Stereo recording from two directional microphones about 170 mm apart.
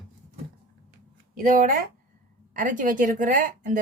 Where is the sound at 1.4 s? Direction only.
55° right (ahead or behind).